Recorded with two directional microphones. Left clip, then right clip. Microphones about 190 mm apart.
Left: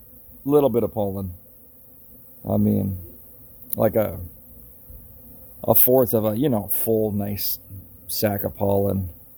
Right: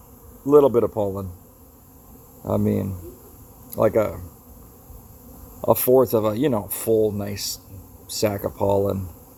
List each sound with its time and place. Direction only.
0.4 s speech: 35° left (ahead or behind)
2.5 s speech: 30° left (ahead or behind)
5.6 s speech: 30° left (ahead or behind)